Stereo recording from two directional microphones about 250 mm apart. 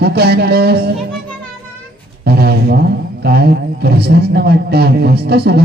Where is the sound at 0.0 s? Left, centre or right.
Right.